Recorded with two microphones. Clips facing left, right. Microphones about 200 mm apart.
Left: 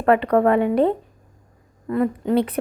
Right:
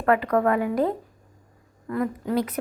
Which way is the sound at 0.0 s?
30° left (ahead or behind).